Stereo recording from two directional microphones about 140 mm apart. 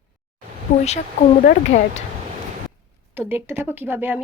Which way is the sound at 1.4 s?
55° left (ahead or behind).